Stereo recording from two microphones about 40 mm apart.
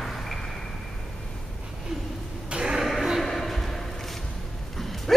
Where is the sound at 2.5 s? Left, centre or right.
Right.